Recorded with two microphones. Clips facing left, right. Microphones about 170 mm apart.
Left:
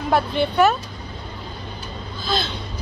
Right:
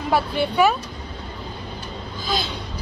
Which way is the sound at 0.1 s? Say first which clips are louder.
Left 1 dB; 10° right (ahead or behind).